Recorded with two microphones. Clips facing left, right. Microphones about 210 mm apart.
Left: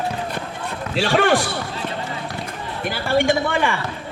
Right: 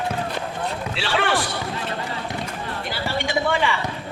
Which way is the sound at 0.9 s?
45° left (ahead or behind).